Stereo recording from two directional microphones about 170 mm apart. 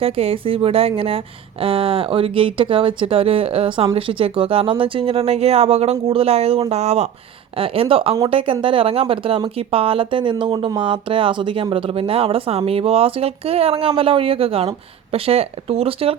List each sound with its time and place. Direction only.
0.0 s speech: 35° right (ahead or behind)